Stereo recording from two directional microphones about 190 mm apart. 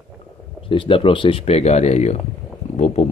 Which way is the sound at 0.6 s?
30° left (ahead or behind).